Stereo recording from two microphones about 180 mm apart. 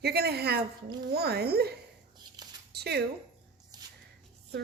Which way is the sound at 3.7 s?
20° right (ahead or behind).